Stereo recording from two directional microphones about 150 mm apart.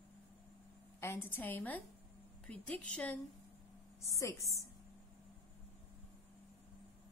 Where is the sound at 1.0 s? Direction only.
15° left (ahead or behind).